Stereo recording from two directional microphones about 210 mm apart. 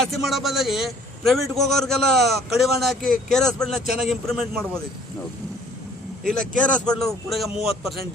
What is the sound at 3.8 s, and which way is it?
Speech, 45° right (ahead or behind).